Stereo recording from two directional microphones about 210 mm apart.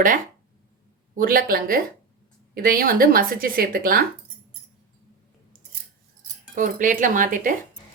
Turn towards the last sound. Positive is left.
turn(degrees=-40)  # may be behind; listen again after turning